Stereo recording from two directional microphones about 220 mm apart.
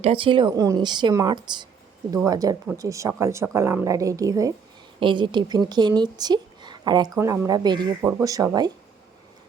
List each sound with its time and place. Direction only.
0.0 s a woman's voice: 25° right (ahead or behind)